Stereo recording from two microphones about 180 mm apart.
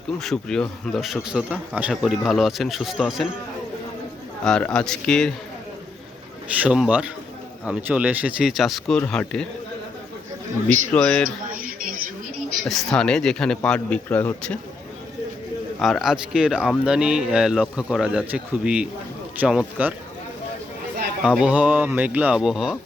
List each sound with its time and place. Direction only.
0.2 s speech: 5° left (ahead or behind)
4.4 s speech: 5° left (ahead or behind)
6.5 s speech: 5° right (ahead or behind)
10.9 s a man's voice: 5° left (ahead or behind)
11.5 s a sound: 50° right (ahead or behind)
12.6 s a man's voice: centre (ahead or behind)
15.8 s speech: centre (ahead or behind)
21.2 s speech: 5° right (ahead or behind)